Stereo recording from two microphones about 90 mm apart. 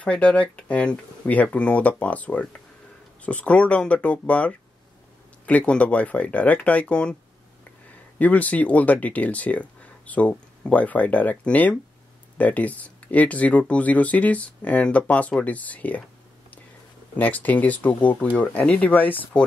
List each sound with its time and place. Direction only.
0.0 s speech: 15° left (ahead or behind)
8.2 s speech: 15° left (ahead or behind)
17.2 s speech: 20° left (ahead or behind)